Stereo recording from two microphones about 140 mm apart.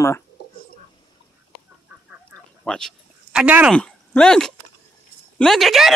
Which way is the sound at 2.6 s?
5° left (ahead or behind).